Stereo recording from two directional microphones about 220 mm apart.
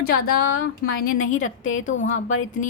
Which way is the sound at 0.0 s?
45° left (ahead or behind).